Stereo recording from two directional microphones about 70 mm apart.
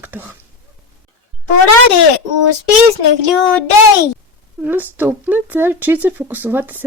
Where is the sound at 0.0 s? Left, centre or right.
Right.